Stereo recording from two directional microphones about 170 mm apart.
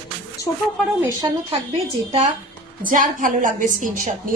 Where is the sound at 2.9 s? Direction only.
50° right (ahead or behind).